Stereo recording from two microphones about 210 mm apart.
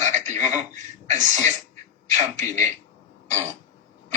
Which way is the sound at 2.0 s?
35° right (ahead or behind).